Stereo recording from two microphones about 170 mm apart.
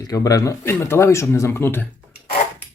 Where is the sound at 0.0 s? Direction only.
20° left (ahead or behind).